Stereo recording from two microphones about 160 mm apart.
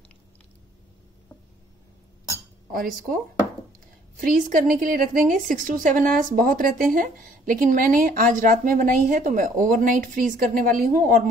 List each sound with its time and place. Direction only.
2.7 s speech: 65° right (ahead or behind)
4.2 s speech: 60° right (ahead or behind)